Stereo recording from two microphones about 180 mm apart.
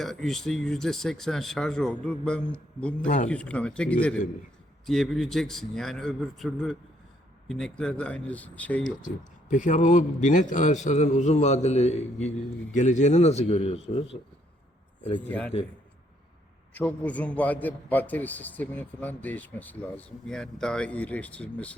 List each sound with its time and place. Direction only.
0.0 s a man's voice: centre (ahead or behind)
8.8 s a man's voice: 45° left (ahead or behind)
15.3 s a man's voice: 10° left (ahead or behind)
16.7 s a man's voice: 10° left (ahead or behind)